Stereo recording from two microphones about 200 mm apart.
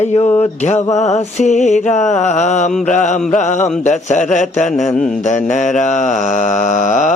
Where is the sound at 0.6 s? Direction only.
35° left (ahead or behind).